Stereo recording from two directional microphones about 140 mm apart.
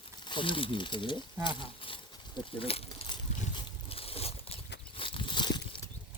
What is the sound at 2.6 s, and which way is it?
Boat, 40° left (ahead or behind).